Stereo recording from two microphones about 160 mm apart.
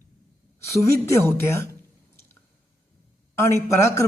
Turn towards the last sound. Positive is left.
turn(degrees=15)  # may be behind; listen again after turning